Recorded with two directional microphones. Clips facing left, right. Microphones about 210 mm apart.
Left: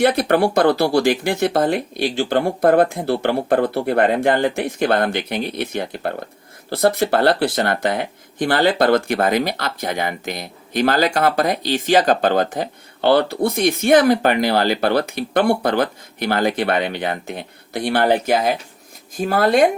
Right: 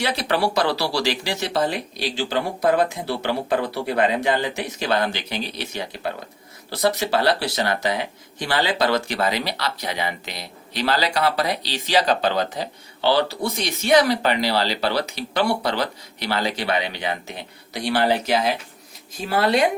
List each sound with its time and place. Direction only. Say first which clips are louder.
0.0 s speech: left 7 dB; 55° left (ahead or behind)